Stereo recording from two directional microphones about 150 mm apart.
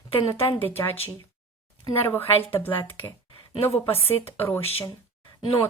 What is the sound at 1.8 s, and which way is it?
Speech, 15° left (ahead or behind).